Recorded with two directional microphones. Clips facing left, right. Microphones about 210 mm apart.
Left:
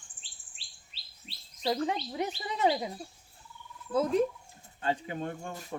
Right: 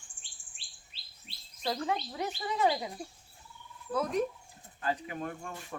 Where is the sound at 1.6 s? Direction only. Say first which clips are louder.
Left 3 dB; 20° left (ahead or behind).